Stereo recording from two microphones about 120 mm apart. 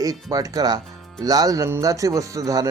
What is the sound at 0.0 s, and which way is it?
A man's voice, 30° right (ahead or behind).